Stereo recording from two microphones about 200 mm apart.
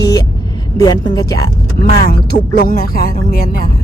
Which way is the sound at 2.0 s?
50° left (ahead or behind).